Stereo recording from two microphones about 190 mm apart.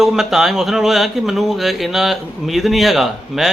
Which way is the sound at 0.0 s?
Centre (ahead or behind).